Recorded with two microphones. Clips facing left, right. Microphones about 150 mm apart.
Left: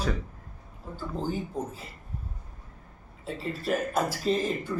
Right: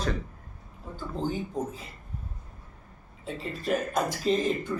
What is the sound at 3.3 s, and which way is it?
Speech, 5° left (ahead or behind).